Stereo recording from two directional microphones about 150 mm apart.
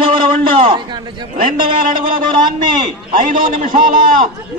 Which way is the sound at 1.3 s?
65° right (ahead or behind).